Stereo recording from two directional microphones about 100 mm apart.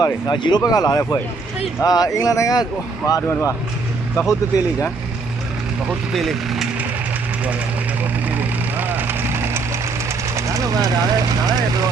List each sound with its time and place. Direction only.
0.0 s speech: 50° left (ahead or behind); by 4.9 s 30° left (ahead or behind)
5.9 s speech: centre (ahead or behind)
8.4 s vehicle: 20° right (ahead or behind)
10.1 s speech: 30° right (ahead or behind)